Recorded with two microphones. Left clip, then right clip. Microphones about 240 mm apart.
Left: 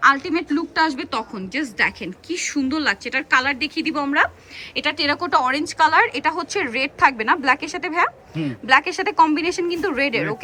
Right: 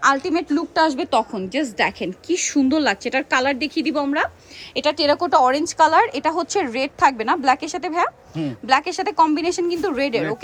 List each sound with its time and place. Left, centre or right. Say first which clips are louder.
0.0 s a woman's voice: left 1 dB; centre